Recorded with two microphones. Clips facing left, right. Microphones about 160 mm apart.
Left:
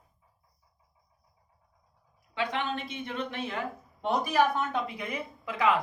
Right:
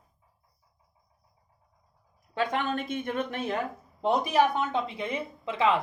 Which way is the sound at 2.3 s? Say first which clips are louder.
Right 3 dB; 45° right (ahead or behind).